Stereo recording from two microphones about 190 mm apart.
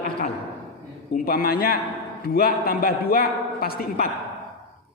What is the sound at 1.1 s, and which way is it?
A man's voice, 50° left (ahead or behind).